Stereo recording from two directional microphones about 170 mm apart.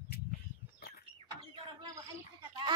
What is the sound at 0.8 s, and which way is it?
Chicken, 65° left (ahead or behind).